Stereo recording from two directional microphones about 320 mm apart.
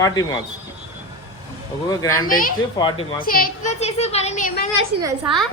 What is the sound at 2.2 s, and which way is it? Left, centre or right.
Speech, left.